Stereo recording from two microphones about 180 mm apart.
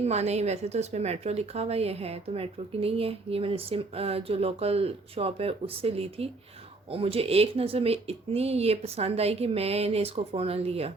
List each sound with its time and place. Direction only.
0.0 s speech: 35° right (ahead or behind)